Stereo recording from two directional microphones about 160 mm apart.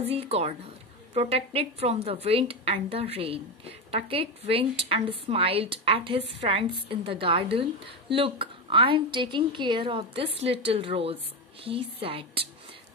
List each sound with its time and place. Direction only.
0.0 s a woman's voice: 40° right (ahead or behind)